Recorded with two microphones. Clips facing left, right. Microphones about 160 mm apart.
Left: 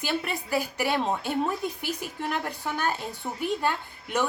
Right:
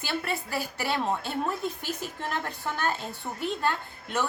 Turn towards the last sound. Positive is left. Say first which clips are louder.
# left 2 dB
turn(degrees=15)  # may be behind; listen again after turning